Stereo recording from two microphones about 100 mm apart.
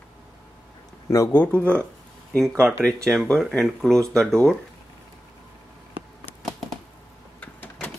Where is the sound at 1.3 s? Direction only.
15° left (ahead or behind).